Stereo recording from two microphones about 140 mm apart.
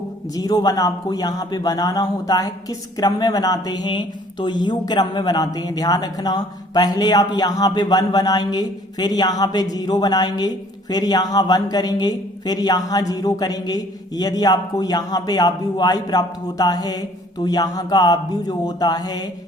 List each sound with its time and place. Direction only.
0.3 s a man's voice: 25° left (ahead or behind)